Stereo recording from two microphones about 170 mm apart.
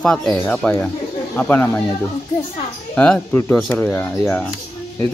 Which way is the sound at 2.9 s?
10° left (ahead or behind).